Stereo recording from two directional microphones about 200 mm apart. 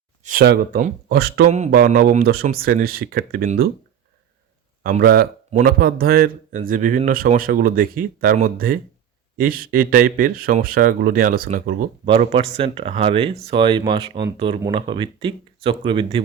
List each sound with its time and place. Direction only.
0.3 s speech: 50° right (ahead or behind)
1.5 s a sound: 35° right (ahead or behind)
1.7 s speech: 45° right (ahead or behind)
4.8 s speech: 45° right (ahead or behind)
12.0 s speech: 25° right (ahead or behind)